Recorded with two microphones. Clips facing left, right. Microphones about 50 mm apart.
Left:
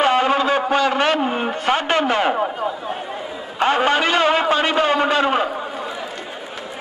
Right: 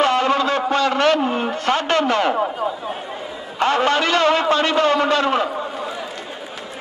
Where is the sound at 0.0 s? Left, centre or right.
Centre.